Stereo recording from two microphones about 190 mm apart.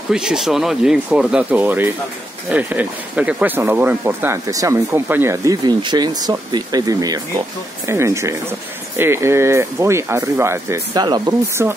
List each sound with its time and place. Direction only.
0.1 s speech: 5° right (ahead or behind)